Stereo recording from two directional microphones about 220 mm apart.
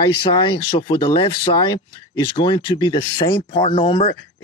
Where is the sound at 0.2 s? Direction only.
20° left (ahead or behind).